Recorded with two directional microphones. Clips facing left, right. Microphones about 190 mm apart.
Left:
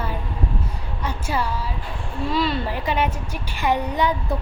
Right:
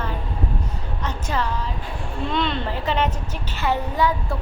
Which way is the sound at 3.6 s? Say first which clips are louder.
Left 1 dB; 15° left (ahead or behind).